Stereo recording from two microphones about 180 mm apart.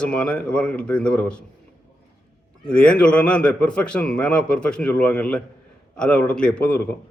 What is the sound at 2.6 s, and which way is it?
A man's voice, 5° left (ahead or behind).